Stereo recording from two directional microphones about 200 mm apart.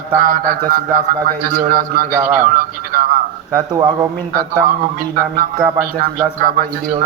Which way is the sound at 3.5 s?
20° right (ahead or behind).